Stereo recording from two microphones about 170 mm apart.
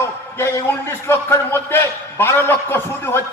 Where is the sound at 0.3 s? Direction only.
15° left (ahead or behind).